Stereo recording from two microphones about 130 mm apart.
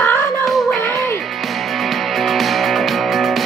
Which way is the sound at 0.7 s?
20° left (ahead or behind).